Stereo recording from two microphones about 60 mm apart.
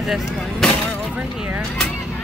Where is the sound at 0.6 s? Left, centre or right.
Centre.